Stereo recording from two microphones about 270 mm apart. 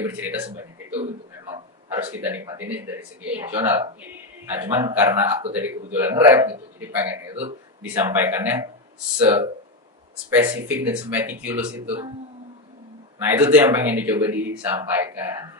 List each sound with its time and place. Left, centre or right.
0.0 s a man's voice: centre
2.0 s a man's voice: centre
13.2 s a man's voice: centre